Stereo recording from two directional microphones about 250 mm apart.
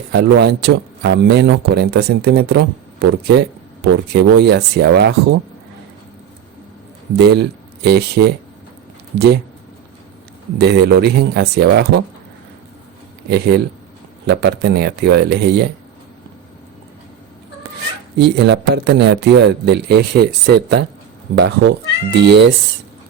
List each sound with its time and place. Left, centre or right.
0.1 s a man's voice: right
7.2 s a man's voice: right
10.6 s a man's voice: right
13.3 s a man's voice: right
18.2 s a man's voice: right